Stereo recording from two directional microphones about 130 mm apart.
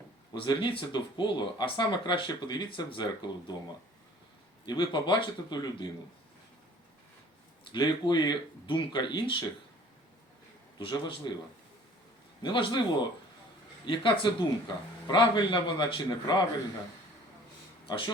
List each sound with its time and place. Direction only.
0.3 s speech: 40° left (ahead or behind)
4.6 s speech: 35° left (ahead or behind)
7.7 s speech: 35° left (ahead or behind)
10.8 s speech: 40° left (ahead or behind)
12.4 s speech: 40° left (ahead or behind)
17.8 s speech: 40° left (ahead or behind)